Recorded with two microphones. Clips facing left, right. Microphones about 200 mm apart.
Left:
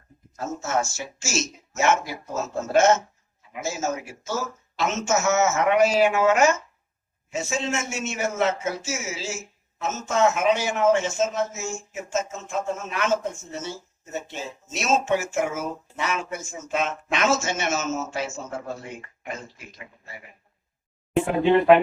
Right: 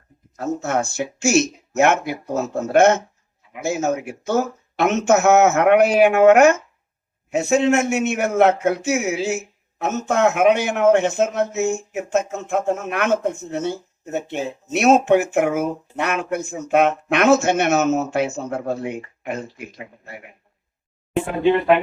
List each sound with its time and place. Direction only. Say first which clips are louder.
0.6 s speech: right 2 dB; 60° right (ahead or behind)